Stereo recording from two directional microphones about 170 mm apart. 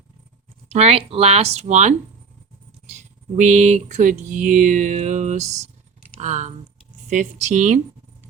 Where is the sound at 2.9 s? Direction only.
45° right (ahead or behind).